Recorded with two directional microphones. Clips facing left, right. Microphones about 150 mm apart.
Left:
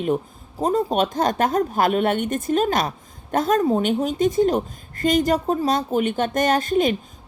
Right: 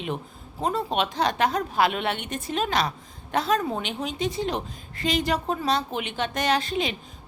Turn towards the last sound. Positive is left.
turn(degrees=50)  # may be behind; listen again after turning